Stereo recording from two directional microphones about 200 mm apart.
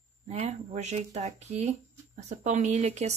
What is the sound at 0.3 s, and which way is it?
A woman's voice, 30° right (ahead or behind).